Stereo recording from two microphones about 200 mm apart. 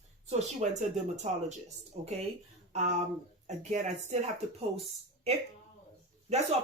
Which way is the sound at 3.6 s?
35° right (ahead or behind).